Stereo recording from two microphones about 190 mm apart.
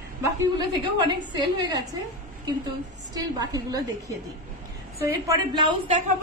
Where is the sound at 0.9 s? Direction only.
20° right (ahead or behind).